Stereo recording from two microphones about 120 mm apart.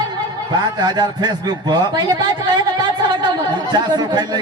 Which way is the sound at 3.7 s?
35° right (ahead or behind).